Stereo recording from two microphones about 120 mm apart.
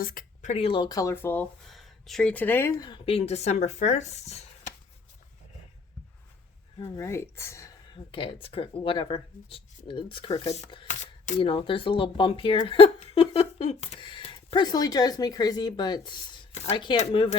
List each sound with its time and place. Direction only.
0.4 s speech: 60° left (ahead or behind)
0.9 s speech: 25° left (ahead or behind)
1.6 s speech: centre (ahead or behind); by 2.7 s 20° left (ahead or behind)
3.1 s speech: 60° left (ahead or behind)
6.7 s speech: 35° left (ahead or behind)
7.0 s speech: 25° left (ahead or behind)
7.9 s speech: 45° left (ahead or behind); by 10.7 s 65° left (ahead or behind)
10.8 s speech: 90° left
11.3 s speech: 45° left (ahead or behind)